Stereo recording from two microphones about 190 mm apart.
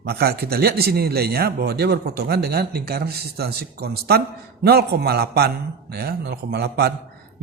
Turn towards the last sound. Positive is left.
turn(degrees=-60)  # may be behind; listen again after turning